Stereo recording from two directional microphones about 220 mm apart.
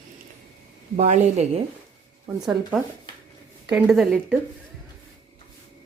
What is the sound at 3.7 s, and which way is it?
Speech, centre (ahead or behind).